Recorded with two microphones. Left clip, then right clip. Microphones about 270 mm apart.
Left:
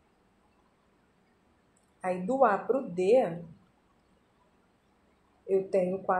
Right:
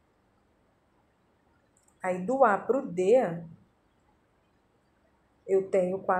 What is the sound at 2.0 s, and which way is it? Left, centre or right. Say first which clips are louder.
A woman's voice: right 2 dB; centre.